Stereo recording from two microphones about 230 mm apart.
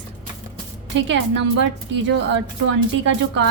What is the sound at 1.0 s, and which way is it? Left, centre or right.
Speech, right.